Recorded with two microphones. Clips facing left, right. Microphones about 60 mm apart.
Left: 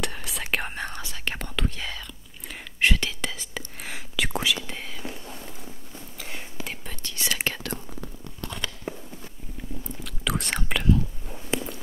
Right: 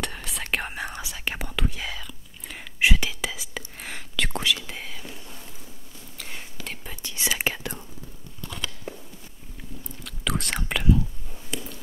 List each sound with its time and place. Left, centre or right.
0.0 s whispering: centre
6.1 s whispering: centre
6.9 s whispering: centre
7.7 s whispering: left
10.0 s whispering: centre